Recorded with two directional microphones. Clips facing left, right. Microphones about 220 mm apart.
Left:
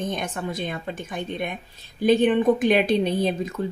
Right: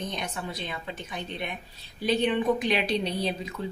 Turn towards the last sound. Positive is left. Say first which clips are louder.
# left 7 dB
turn(degrees=50)  # may be behind; listen again after turning